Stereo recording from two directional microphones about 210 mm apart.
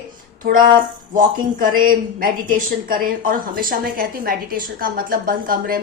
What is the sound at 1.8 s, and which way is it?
A woman's voice, 40° right (ahead or behind).